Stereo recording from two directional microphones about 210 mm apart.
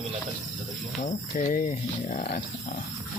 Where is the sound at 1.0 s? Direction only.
35° left (ahead or behind).